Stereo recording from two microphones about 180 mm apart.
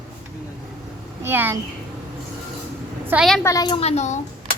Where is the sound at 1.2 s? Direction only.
10° right (ahead or behind).